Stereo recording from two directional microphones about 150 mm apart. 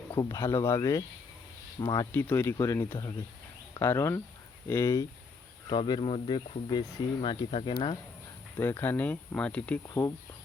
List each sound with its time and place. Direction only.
0.1 s speech: 20° left (ahead or behind)
5.6 s speech: 30° left (ahead or behind)
8.5 s speech: 15° left (ahead or behind)
9.8 s speech: 20° left (ahead or behind)